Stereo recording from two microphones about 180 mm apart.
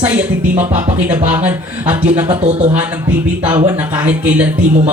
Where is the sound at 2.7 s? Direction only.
10° right (ahead or behind).